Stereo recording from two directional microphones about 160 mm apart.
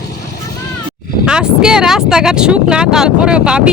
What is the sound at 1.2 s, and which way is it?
Speech, 5° right (ahead or behind).